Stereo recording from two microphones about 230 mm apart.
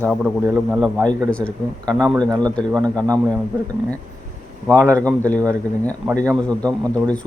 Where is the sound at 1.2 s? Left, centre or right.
Centre.